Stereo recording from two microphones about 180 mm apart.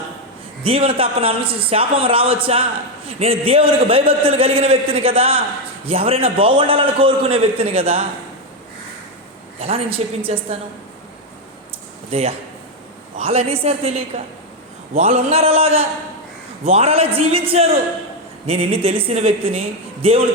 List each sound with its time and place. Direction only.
0.6 s a man's voice: 30° right (ahead or behind)
9.6 s a man's voice: 35° right (ahead or behind)
12.1 s a man's voice: 35° right (ahead or behind)